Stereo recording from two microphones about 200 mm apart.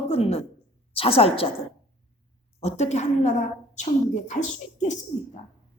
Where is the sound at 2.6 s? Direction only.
35° left (ahead or behind).